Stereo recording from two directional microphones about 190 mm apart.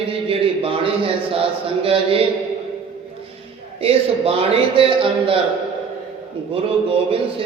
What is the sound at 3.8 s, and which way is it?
Speech, 30° right (ahead or behind).